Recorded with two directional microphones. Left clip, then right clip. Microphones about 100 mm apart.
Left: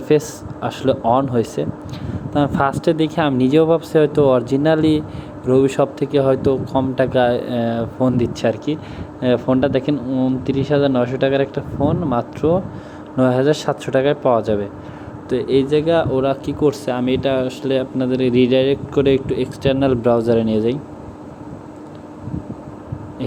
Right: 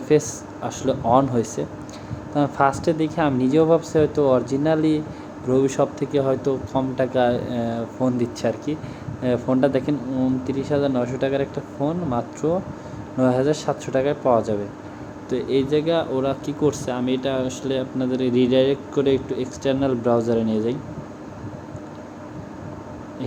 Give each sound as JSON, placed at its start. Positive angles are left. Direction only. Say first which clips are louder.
{"t": 0.1, "sound": "speech", "louder": "left 3 dB", "side_deg": 35}
{"t": 10.1, "sound": "speech", "louder": "left 4 dB", "side_deg": 25}